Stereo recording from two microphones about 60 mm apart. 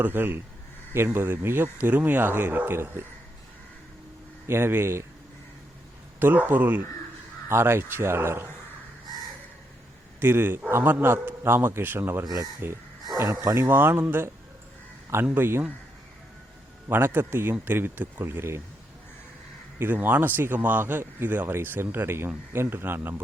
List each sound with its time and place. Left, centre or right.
0.0 s speech: right
4.4 s a man's voice: right
6.1 s speech: right
7.4 s a man's voice: right
10.2 s speech: right
12.2 s speech: right
13.6 s a man's voice: right
16.9 s speech: right
19.8 s speech: right